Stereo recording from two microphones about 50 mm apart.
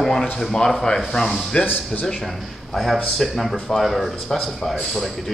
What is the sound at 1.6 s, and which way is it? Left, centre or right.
Speech, left.